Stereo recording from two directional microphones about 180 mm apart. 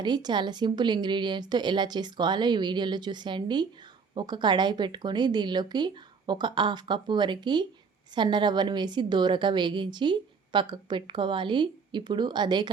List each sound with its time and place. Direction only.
0.0 s a woman's voice: 25° right (ahead or behind)